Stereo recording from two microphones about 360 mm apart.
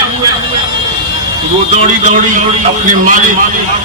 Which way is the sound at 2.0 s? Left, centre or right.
Right.